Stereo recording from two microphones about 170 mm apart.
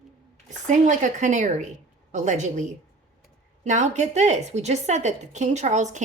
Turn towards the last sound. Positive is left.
turn(degrees=-45)  # may be behind; listen again after turning